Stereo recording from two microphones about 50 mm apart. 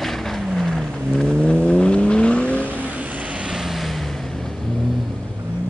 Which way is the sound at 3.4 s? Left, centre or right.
Centre.